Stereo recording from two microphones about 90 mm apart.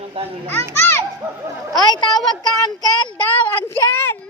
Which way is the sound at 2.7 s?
55° left (ahead or behind).